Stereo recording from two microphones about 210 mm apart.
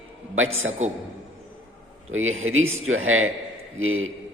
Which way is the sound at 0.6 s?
65° right (ahead or behind).